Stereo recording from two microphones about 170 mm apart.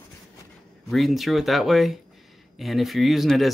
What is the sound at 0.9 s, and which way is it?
Speech, centre (ahead or behind).